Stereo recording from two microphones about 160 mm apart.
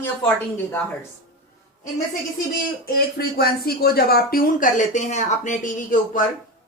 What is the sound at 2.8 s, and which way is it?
Speech, 75° left (ahead or behind).